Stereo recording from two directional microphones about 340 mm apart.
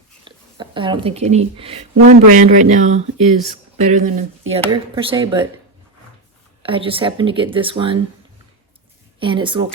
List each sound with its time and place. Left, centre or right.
0.3 s a woman's voice: centre
6.6 s speech: centre
9.2 s speech: centre